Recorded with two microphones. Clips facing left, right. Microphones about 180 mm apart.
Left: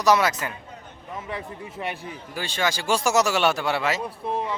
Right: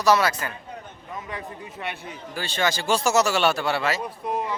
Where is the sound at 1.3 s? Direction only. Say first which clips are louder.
Left 2 dB; 30° left (ahead or behind).